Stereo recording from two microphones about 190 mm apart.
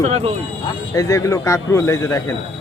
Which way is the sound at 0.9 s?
15° left (ahead or behind).